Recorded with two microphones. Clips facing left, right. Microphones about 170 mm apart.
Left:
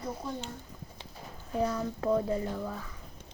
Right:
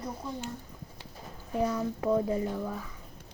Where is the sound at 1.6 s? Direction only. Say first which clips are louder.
Right 1 dB; 15° right (ahead or behind).